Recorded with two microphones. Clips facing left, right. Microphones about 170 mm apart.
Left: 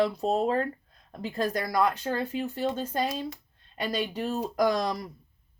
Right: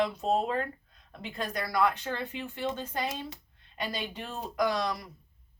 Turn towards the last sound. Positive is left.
turn(degrees=40)  # may be behind; listen again after turning